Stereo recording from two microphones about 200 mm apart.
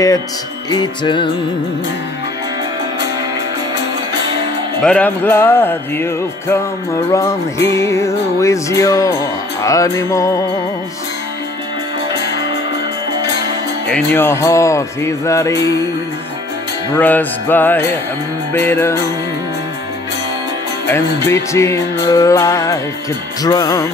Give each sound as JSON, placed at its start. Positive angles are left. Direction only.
{"t": 0.7, "sound": "music", "side_deg": 20}
{"t": 4.8, "sound": "music", "side_deg": 5}
{"t": 13.8, "sound": "music", "side_deg": 10}
{"t": 16.9, "sound": "music", "side_deg": 10}
{"t": 20.9, "sound": "music", "side_deg": 15}